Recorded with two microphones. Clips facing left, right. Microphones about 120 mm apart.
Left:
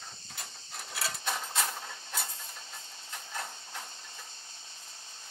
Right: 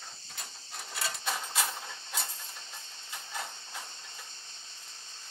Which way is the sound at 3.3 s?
5° right (ahead or behind).